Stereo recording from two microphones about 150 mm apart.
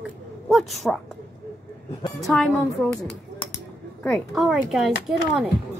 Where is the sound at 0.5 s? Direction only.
Centre (ahead or behind).